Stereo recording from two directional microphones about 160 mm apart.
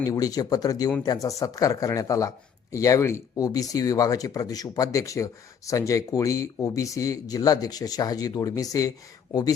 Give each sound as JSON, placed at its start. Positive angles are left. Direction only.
{"t": 0.0, "sound": "speech", "side_deg": 25}